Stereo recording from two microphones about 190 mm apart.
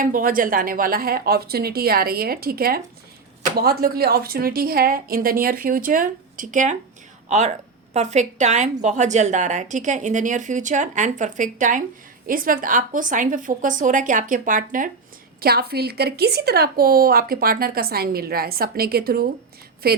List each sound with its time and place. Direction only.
0.0 s a woman's voice: 45° right (ahead or behind)
15.4 s a woman's voice: 55° right (ahead or behind)